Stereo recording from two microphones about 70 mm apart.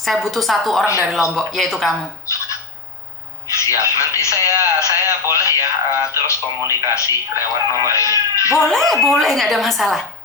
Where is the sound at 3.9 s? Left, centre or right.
Left.